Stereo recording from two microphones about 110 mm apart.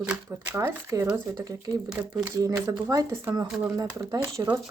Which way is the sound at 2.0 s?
15° right (ahead or behind).